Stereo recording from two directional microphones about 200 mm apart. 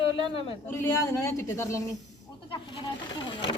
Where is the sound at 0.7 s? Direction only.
10° left (ahead or behind).